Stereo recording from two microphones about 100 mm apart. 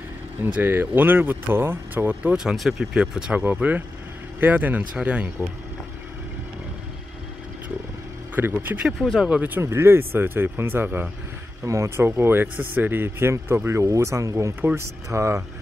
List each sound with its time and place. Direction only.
0.5 s speech: 20° right (ahead or behind)
2.4 s speech: centre (ahead or behind)
8.4 s speech: 20° right (ahead or behind)
8.8 s speech: centre (ahead or behind)
9.3 s speech: 20° right (ahead or behind)
11.6 s speech: 30° right (ahead or behind)